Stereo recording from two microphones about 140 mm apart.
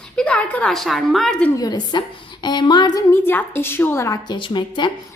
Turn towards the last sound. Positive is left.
turn(degrees=35)  # may be behind; listen again after turning